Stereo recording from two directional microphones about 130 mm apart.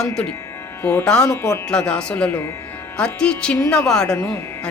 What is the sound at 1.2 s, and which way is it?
Speech, 25° left (ahead or behind).